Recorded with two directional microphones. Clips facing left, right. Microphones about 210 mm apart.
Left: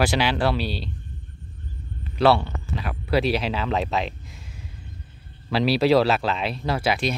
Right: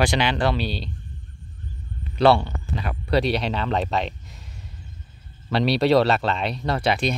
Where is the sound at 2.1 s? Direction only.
5° left (ahead or behind).